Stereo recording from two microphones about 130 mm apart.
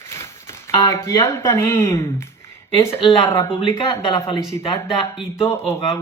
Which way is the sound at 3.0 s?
40° left (ahead or behind).